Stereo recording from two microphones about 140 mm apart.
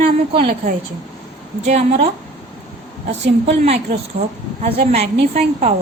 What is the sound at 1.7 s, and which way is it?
Speech, 50° right (ahead or behind).